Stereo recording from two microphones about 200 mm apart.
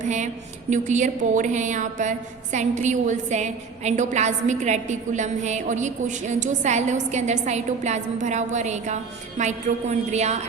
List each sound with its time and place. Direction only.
0.0 s a woman's voice: 35° right (ahead or behind)